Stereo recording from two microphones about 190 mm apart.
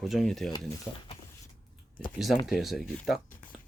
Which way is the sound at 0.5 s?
25° left (ahead or behind).